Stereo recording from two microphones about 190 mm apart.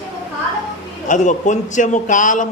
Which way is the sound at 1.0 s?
40° left (ahead or behind).